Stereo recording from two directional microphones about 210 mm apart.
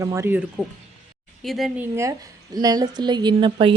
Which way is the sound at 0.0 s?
15° right (ahead or behind).